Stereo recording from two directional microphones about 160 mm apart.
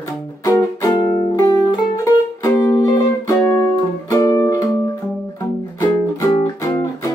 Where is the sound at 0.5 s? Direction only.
20° left (ahead or behind).